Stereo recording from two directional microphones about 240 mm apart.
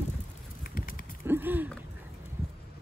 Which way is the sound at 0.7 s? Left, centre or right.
Left.